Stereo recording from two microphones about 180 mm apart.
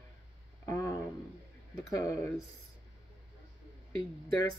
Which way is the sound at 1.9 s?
20° left (ahead or behind).